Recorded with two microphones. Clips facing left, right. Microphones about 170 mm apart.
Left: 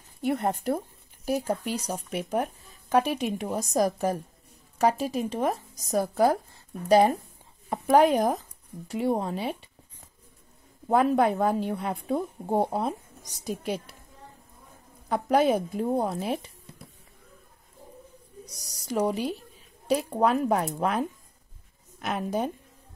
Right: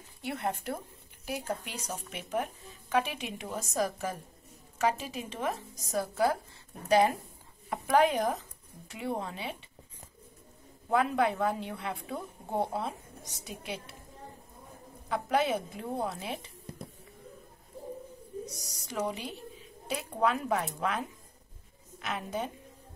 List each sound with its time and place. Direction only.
0.2 s speech: 45° left (ahead or behind)
10.9 s speech: 40° left (ahead or behind)
15.0 s speech: 45° left (ahead or behind)
18.9 s speech: 40° left (ahead or behind)
22.0 s speech: 45° left (ahead or behind)